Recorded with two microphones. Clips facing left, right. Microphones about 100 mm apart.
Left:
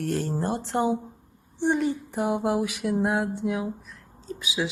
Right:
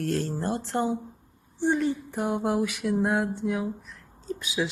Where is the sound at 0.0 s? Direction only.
15° left (ahead or behind).